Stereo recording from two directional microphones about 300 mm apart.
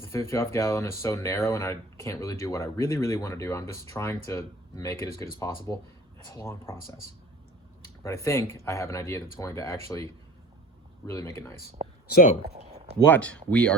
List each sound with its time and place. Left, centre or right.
0.0 s speech: centre
8.0 s speech: centre
12.1 s speech: left
13.1 s speech: centre